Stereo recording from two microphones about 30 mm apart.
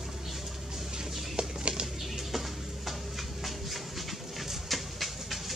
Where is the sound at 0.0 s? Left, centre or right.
Centre.